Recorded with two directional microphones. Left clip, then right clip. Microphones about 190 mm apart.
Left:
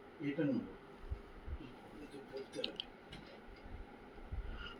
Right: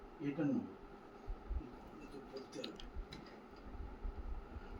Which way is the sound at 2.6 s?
30° right (ahead or behind).